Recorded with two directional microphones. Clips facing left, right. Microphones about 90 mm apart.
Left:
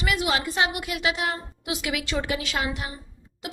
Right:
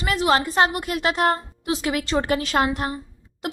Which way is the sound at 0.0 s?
35° right (ahead or behind).